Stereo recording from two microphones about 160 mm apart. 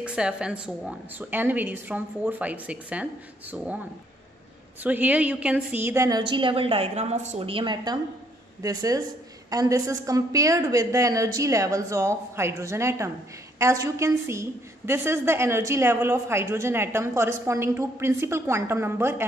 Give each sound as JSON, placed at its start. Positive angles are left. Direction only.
{"t": 0.0, "sound": "a woman's voice", "side_deg": -5}
{"t": 4.8, "sound": "a woman's voice", "side_deg": -10}